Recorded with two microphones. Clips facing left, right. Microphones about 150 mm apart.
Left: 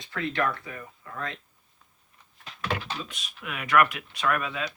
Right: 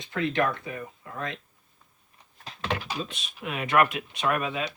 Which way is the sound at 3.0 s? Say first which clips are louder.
Right 4 dB; 25° right (ahead or behind).